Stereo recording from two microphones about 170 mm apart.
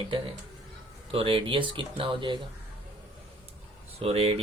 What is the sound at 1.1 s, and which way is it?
Speech, 30° right (ahead or behind).